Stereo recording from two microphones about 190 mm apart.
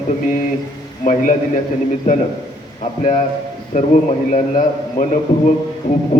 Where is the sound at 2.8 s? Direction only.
35° left (ahead or behind).